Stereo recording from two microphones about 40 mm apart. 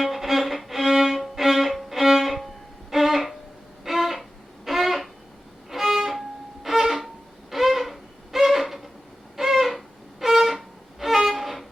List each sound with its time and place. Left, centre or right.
0.0 s music: centre
3.8 s a sound: centre
5.7 s violin: centre
7.5 s a sound: centre
9.3 s music: centre
11.0 s violin: centre